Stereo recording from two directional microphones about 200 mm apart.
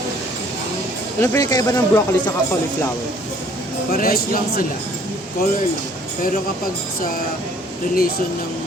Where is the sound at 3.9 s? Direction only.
45° left (ahead or behind).